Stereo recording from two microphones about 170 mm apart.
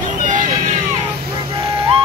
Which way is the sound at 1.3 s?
30° right (ahead or behind).